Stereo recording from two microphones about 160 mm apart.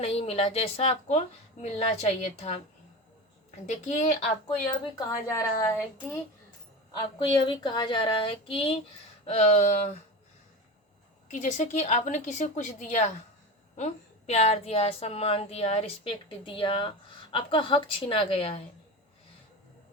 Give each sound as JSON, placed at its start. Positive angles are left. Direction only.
{"t": 0.0, "sound": "a woman's voice", "side_deg": 40}
{"t": 3.7, "sound": "a woman's voice", "side_deg": 50}
{"t": 4.9, "sound": "a woman's voice", "side_deg": 20}
{"t": 6.9, "sound": "a woman's voice", "side_deg": 30}
{"t": 11.3, "sound": "a woman's voice", "side_deg": 50}